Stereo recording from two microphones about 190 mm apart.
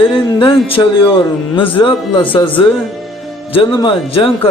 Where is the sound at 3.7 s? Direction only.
25° left (ahead or behind).